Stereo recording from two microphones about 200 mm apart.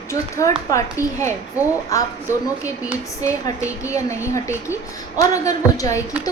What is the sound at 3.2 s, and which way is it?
A woman's voice, 15° left (ahead or behind).